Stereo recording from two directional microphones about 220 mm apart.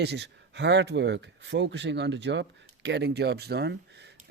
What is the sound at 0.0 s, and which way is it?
Speech, 50° right (ahead or behind).